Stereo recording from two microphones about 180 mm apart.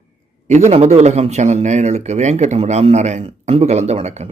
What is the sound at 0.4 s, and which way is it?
Speech, 40° right (ahead or behind).